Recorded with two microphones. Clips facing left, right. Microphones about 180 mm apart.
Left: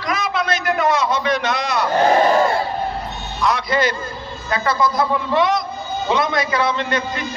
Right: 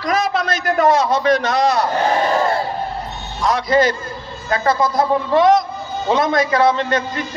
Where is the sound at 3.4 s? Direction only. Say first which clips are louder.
Right 3 dB; 40° right (ahead or behind).